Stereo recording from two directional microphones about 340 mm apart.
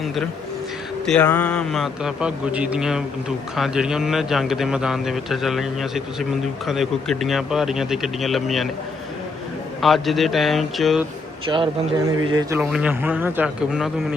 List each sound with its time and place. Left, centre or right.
1.0 s a man's voice: centre
9.8 s a man's voice: centre
11.4 s a man's voice: centre